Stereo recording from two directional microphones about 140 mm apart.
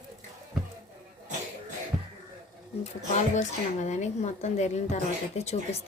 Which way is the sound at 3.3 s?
55° left (ahead or behind).